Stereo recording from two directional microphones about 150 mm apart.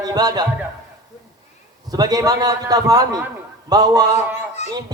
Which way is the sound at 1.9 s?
25° right (ahead or behind).